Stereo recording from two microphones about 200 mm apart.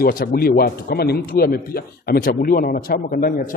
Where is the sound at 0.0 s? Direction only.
50° left (ahead or behind).